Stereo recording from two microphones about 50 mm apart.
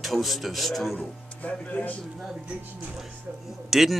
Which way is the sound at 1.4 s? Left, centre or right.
Left.